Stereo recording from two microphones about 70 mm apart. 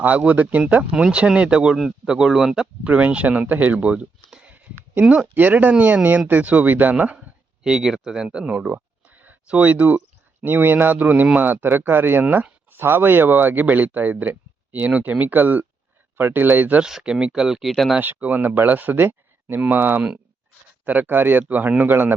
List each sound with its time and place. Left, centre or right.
0.0 s a man's voice: right
2.8 s a man's voice: centre
4.4 s a sound: right
5.2 s a man's voice: right
7.6 s speech: centre
9.0 s a sound: right
10.4 s a man's voice: right
16.8 s speech: centre
18.0 s a man's voice: right